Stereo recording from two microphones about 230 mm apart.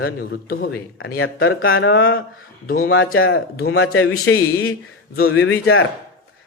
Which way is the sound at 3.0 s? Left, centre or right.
Left.